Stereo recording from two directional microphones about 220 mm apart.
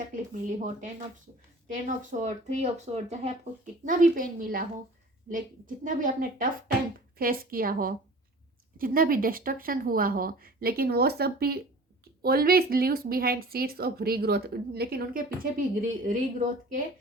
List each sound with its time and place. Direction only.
0.4 s speech: 35° right (ahead or behind)